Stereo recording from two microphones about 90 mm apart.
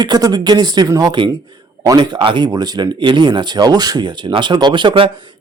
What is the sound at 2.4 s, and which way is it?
A man's voice, 50° right (ahead or behind).